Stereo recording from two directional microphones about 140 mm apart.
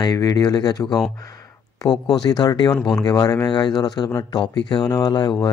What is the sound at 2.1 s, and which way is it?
Speech, 30° left (ahead or behind).